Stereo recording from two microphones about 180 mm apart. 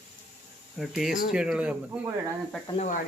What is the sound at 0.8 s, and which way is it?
Speech, centre (ahead or behind).